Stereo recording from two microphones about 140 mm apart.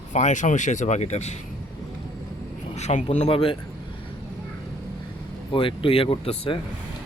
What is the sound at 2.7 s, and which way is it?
Speech, 55° left (ahead or behind).